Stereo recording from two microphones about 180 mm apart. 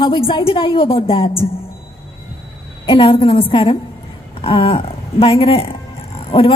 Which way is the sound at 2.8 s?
30° left (ahead or behind).